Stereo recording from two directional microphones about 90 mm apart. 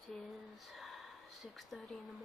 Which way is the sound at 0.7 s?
Centre (ahead or behind).